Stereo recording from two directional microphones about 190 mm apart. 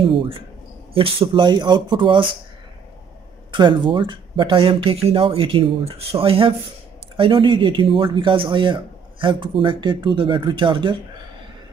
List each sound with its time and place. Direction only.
0.0 s speech: 30° right (ahead or behind)
3.5 s speech: 25° right (ahead or behind)